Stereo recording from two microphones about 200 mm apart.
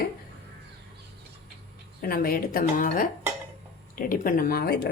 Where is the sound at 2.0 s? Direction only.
45° left (ahead or behind).